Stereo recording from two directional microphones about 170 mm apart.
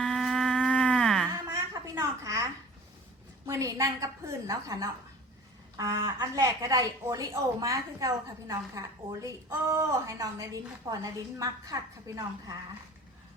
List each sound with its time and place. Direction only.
0.0 s livestock: centre (ahead or behind)
1.7 s a sound: 20° right (ahead or behind)
3.4 s a woman's voice: 20° right (ahead or behind)